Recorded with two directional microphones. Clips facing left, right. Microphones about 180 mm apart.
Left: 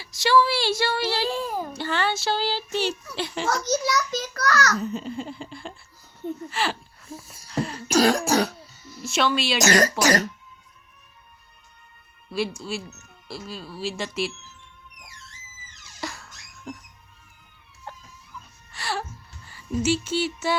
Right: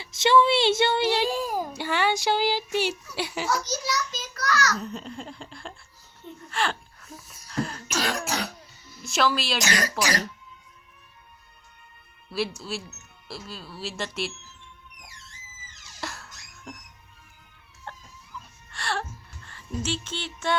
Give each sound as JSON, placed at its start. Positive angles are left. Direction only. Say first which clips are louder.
{"t": 0.0, "sound": "a child's voice", "louder": "right 1 dB", "side_deg": -20}
{"t": 3.5, "sound": "a child's voice", "louder": "left 6 dB", "side_deg": 55}
{"t": 4.8, "sound": "speech", "louder": "left 6 dB", "side_deg": 0}
{"t": 7.4, "sound": "throat clearing", "louder": "left 2 dB", "side_deg": 0}
{"t": 7.9, "sound": "throat clearing", "louder": "left 9 dB", "side_deg": 35}
{"t": 9.0, "sound": "speech", "louder": "left 1 dB", "side_deg": 0}
{"t": 9.6, "sound": "speech", "louder": "left 7 dB", "side_deg": 45}
{"t": 12.3, "sound": "speech", "louder": "left 2 dB", "side_deg": 0}
{"t": 16.0, "sound": "music", "louder": "left 2 dB", "side_deg": 0}
{"t": 17.9, "sound": "chicken", "louder": "left 1 dB", "side_deg": 5}
{"t": 18.7, "sound": "music", "louder": "left 1 dB", "side_deg": 5}